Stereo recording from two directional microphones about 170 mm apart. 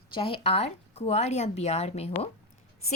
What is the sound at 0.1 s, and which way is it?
A woman's voice, 35° left (ahead or behind).